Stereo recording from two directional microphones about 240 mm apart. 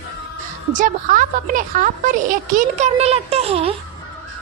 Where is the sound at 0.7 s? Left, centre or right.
Right.